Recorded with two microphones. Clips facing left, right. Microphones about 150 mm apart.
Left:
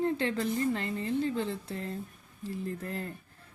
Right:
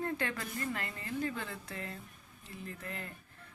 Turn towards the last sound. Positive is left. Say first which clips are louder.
# left 8 dB
turn(degrees=35)  # may be behind; listen again after turning